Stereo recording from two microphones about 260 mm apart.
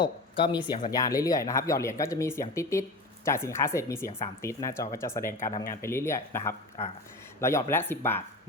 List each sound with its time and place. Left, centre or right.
0.0 s speech: centre